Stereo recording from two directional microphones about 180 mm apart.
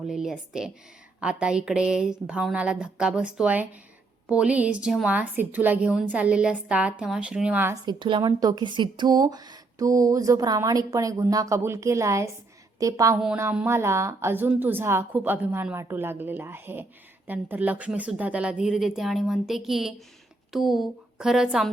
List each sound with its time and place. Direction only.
0.1 s a woman's voice: 5° right (ahead or behind)
7.9 s a woman's voice: 25° right (ahead or behind)
13.1 s a woman's voice: 5° right (ahead or behind)